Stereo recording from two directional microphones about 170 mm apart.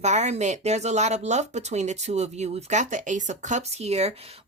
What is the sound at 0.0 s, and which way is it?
Speech, 40° right (ahead or behind).